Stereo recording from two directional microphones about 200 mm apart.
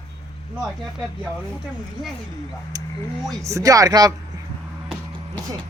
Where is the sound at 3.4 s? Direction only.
15° right (ahead or behind).